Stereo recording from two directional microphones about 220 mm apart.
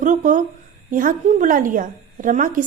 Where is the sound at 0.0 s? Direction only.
35° right (ahead or behind).